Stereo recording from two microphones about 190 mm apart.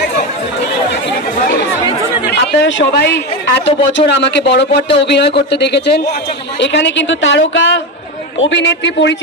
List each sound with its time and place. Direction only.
2.9 s a woman's voice: 60° left (ahead or behind)